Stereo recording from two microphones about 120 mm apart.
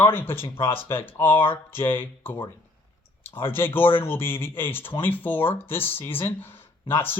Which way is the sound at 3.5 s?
20° left (ahead or behind).